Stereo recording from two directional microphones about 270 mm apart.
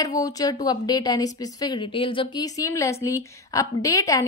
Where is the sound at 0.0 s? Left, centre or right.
Centre.